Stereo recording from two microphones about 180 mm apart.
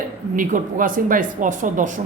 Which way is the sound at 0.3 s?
50° right (ahead or behind).